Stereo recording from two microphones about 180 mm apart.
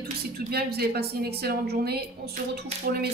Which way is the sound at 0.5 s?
60° right (ahead or behind).